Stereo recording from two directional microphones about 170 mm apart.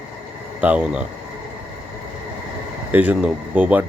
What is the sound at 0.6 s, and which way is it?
Speech, 5° right (ahead or behind).